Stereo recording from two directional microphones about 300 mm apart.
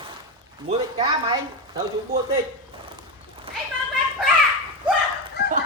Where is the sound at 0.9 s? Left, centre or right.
Centre.